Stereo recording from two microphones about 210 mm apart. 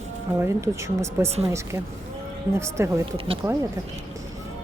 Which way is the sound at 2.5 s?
10° right (ahead or behind).